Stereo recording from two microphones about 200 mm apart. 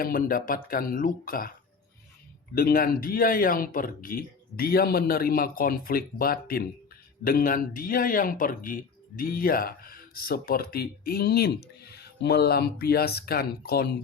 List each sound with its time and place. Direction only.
0.0 s speech: 45° left (ahead or behind)
2.6 s speech: 45° left (ahead or behind)